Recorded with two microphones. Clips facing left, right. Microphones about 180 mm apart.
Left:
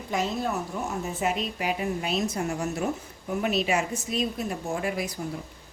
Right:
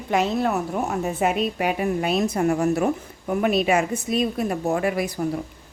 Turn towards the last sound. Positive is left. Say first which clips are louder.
# right 6 dB
turn(degrees=-60)  # may be behind; listen again after turning